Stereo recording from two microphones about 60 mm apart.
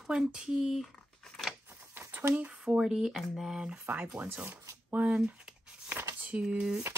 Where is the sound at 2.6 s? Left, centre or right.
Centre.